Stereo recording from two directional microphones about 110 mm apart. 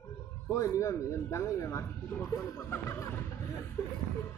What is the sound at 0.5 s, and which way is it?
Speech, 30° left (ahead or behind).